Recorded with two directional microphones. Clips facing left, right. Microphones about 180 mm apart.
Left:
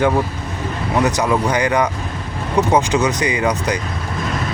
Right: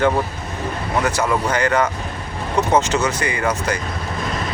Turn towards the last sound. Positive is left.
turn(degrees=15)  # may be behind; listen again after turning